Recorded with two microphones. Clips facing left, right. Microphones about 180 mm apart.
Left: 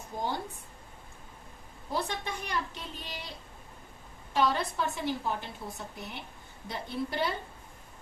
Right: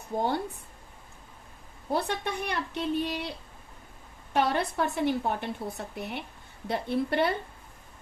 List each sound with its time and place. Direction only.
0.1 s a woman's voice: 60° right (ahead or behind)
1.9 s a woman's voice: 65° right (ahead or behind)
4.4 s a woman's voice: 60° right (ahead or behind)